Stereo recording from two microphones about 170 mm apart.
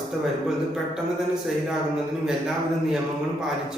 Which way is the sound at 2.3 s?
Centre (ahead or behind).